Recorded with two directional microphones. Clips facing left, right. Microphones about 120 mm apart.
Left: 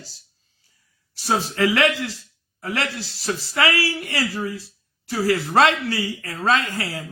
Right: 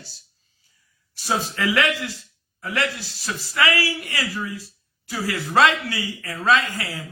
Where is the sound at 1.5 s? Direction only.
30° left (ahead or behind).